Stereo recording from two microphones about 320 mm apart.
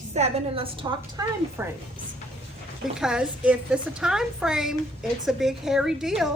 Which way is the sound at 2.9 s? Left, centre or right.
Centre.